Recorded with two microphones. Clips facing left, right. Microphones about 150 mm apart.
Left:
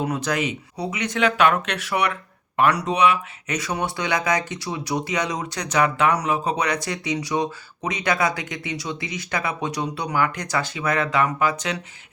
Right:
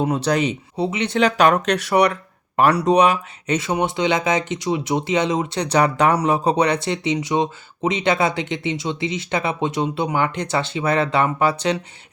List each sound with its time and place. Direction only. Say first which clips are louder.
0.0 s speech: right 5 dB; 30° right (ahead or behind)